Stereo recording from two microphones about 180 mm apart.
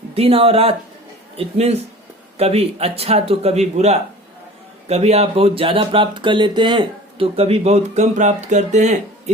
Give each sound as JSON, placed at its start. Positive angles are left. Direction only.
{"t": 0.1, "sound": "speech", "side_deg": -30}